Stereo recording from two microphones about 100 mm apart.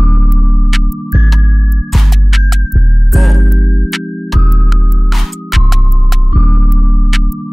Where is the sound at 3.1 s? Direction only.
Centre (ahead or behind).